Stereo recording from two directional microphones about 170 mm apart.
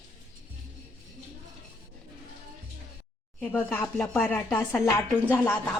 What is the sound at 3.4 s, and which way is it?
Speech, 10° left (ahead or behind).